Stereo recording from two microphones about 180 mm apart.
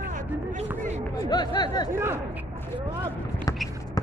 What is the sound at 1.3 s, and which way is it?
Speech, 25° left (ahead or behind).